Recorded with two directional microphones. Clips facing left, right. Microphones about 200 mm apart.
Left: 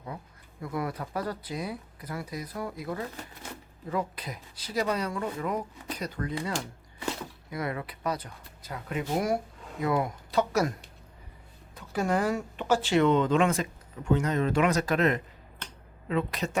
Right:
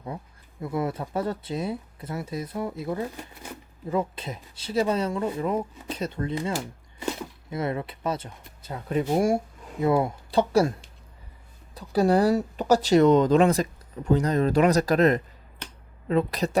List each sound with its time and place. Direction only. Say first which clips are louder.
0.6 s speech: right 5 dB; 25° right (ahead or behind)
7.5 s speech: right 5 dB; 25° right (ahead or behind)